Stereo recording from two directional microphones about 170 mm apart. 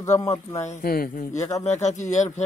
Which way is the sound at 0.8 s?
60° left (ahead or behind).